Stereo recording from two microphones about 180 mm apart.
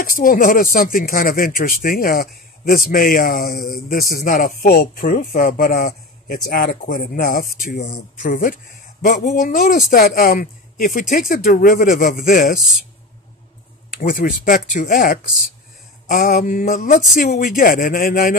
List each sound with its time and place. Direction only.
0.0 s speech: 50° left (ahead or behind)
12.5 s speech: centre (ahead or behind)
13.9 s speech: 50° left (ahead or behind)